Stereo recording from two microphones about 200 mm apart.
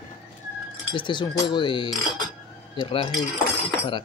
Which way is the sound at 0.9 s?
25° left (ahead or behind).